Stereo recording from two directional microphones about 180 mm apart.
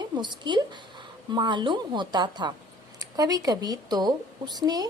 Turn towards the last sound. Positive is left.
turn(degrees=-20)  # may be behind; listen again after turning